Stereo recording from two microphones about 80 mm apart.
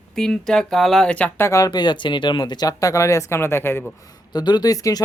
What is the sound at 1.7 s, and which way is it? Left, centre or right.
Speech, left.